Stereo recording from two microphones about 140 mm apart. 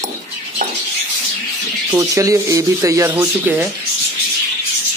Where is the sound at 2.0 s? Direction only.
20° right (ahead or behind).